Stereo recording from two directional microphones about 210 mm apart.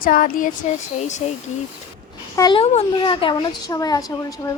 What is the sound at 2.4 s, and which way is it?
A child's voice, 20° left (ahead or behind).